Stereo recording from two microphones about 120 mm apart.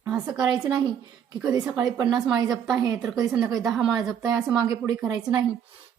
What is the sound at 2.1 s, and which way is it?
Speech, 50° right (ahead or behind).